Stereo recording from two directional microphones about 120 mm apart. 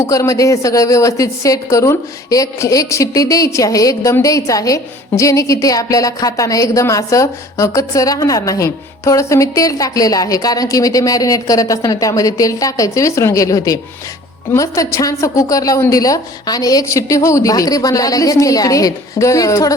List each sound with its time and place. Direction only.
0.0 s a woman's voice: 25° left (ahead or behind)